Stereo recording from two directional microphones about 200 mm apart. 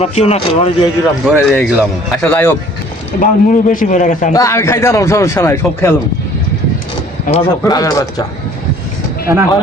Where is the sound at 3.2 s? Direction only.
40° left (ahead or behind).